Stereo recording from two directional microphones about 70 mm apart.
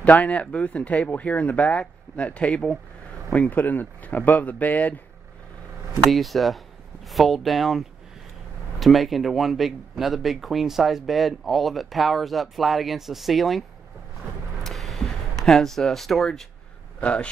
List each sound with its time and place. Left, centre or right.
0.0 s speech: left
6.0 s speech: centre
14.6 s a sound: centre
15.4 s speech: centre
17.0 s a man's voice: centre